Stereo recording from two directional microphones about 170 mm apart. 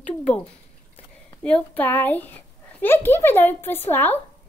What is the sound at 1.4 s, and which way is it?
A child's voice, 10° left (ahead or behind).